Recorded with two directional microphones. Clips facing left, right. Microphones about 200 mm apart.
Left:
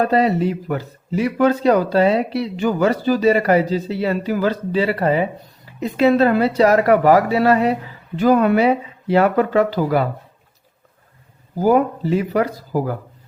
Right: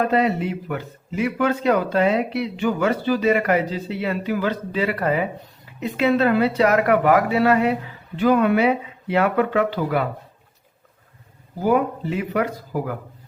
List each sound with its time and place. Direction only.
0.0 s speech: 35° left (ahead or behind)
11.5 s speech: 40° left (ahead or behind)